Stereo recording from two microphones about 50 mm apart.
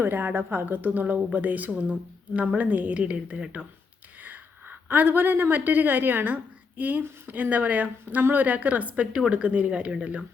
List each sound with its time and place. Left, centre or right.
0.0 s speech: right
4.2 s a woman's voice: right